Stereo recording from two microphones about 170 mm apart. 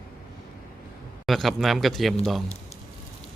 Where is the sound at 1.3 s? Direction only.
Centre (ahead or behind).